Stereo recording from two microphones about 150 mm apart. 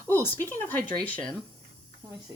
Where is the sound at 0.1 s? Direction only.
15° left (ahead or behind).